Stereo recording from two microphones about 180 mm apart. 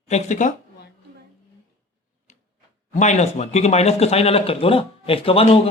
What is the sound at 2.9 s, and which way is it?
Speech, 40° left (ahead or behind).